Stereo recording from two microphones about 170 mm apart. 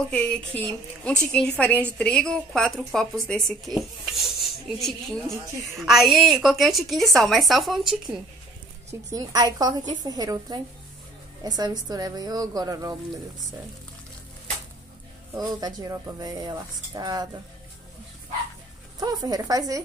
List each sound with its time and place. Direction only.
0.0 s a woman's voice: 5° left (ahead or behind)
9.1 s speech: 20° right (ahead or behind)
15.3 s speech: 20° right (ahead or behind)
18.9 s speech: 20° right (ahead or behind)